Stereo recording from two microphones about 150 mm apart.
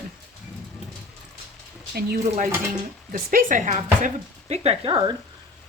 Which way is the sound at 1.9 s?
90° right.